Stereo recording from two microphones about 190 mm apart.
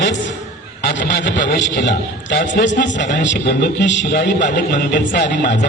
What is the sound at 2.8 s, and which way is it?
A man's voice, 70° left (ahead or behind).